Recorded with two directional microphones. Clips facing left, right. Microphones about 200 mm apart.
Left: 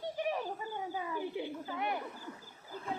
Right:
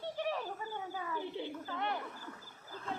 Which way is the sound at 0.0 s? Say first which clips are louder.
Left 2 dB; 15° left (ahead or behind).